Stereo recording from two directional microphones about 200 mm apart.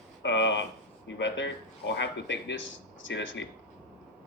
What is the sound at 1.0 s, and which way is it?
Speech, 65° left (ahead or behind).